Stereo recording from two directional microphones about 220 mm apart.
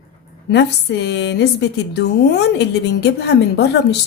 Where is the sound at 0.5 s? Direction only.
50° left (ahead or behind).